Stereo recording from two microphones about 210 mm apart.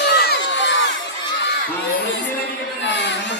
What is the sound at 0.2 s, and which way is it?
Crowd, 55° left (ahead or behind).